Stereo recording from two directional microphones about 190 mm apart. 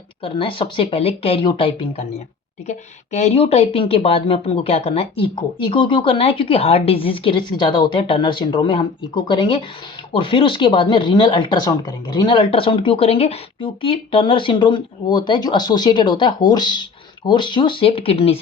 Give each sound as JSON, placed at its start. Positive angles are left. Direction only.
{"t": 0.2, "sound": "speech", "side_deg": 30}